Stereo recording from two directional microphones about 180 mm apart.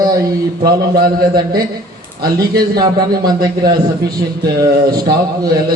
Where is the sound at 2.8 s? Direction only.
20° right (ahead or behind).